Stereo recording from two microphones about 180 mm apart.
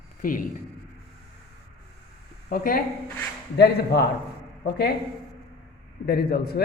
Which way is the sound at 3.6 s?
65° left (ahead or behind).